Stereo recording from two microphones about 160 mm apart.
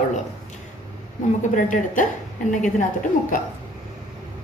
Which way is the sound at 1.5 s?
55° left (ahead or behind).